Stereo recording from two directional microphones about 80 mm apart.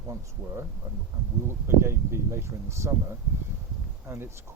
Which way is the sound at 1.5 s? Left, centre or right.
Right.